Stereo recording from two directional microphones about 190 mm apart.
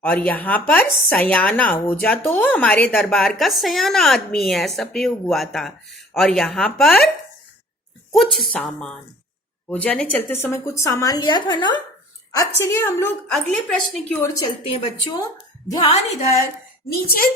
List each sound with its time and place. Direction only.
0.0 s speech: 10° left (ahead or behind)
8.1 s speech: centre (ahead or behind)
13.3 s speech: centre (ahead or behind)
14.7 s speech: 30° left (ahead or behind)
16.9 s a child's voice: 50° left (ahead or behind)